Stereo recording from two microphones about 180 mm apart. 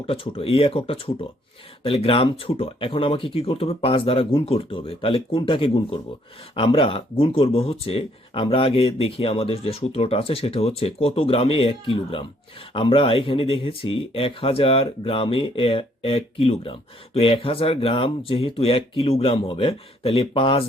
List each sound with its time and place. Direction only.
0.0 s speech: 30° left (ahead or behind)